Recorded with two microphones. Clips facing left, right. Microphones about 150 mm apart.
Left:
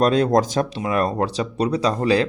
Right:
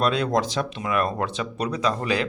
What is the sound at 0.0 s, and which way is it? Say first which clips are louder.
Speech: left 5 dB; 40° left (ahead or behind).